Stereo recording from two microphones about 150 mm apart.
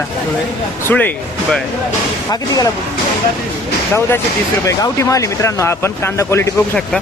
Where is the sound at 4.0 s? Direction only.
15° left (ahead or behind).